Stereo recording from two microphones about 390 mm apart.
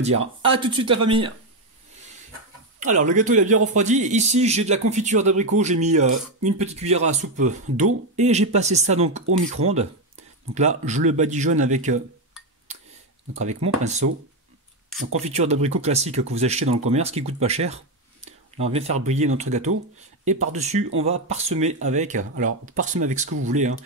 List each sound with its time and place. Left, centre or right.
0.0 s speech: centre
2.8 s speech: centre
13.4 s speech: centre
15.2 s speech: centre